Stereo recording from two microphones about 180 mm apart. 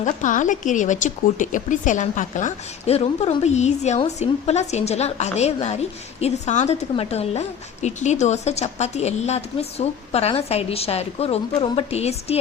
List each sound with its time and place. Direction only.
0.0 s speech: 45° left (ahead or behind)